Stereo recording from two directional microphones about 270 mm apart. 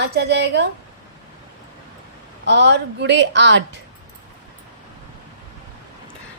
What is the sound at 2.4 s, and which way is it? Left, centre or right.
A woman's voice, right.